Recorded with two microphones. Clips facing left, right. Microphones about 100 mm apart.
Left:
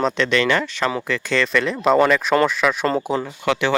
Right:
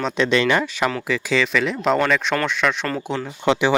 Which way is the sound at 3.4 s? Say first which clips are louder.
Right 4 dB; 20° right (ahead or behind).